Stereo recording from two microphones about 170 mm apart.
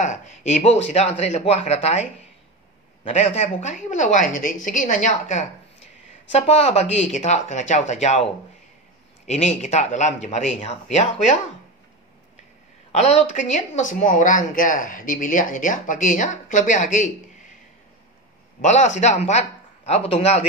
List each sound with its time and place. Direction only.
0.0 s speech: 45° left (ahead or behind)
12.9 s speech: 40° left (ahead or behind)
18.6 s a man's voice: 45° left (ahead or behind)